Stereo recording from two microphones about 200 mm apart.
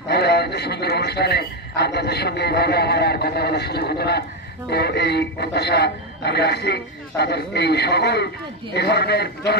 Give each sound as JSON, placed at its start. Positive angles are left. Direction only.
{"t": 0.1, "sound": "a man's voice", "side_deg": 55}